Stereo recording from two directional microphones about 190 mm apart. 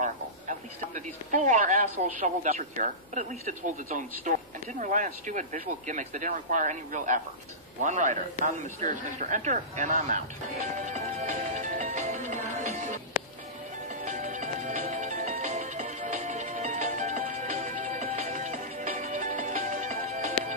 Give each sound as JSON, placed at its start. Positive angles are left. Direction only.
{"t": 0.0, "sound": "speech", "side_deg": -40}
{"t": 13.8, "sound": "music", "side_deg": -40}